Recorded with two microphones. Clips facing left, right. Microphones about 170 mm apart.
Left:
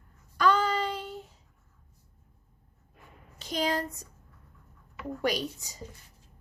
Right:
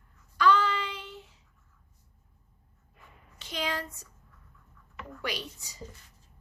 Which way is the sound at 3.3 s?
40° left (ahead or behind).